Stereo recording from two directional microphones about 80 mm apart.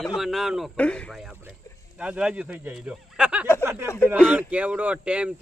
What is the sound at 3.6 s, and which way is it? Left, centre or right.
Speech, right.